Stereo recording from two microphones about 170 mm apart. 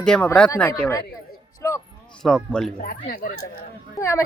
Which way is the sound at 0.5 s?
20° left (ahead or behind).